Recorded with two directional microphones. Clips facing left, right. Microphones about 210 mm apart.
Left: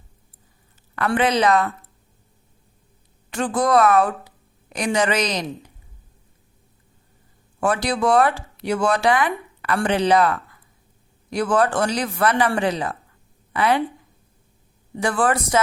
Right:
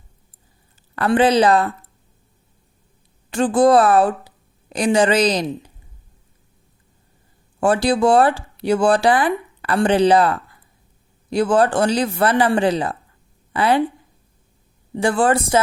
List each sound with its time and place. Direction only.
0.9 s a woman's voice: 30° right (ahead or behind)
3.2 s a woman's voice: 30° right (ahead or behind)
7.6 s a woman's voice: 30° right (ahead or behind)
14.9 s speech: 30° right (ahead or behind)